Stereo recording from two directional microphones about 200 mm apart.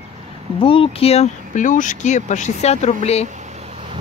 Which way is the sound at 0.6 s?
25° left (ahead or behind).